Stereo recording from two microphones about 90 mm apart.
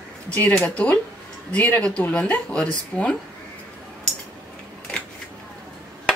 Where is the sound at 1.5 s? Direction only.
15° left (ahead or behind).